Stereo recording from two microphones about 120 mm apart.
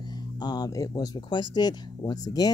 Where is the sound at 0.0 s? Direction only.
35° left (ahead or behind).